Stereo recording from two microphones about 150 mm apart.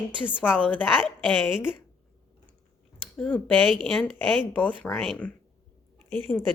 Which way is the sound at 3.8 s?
Centre (ahead or behind).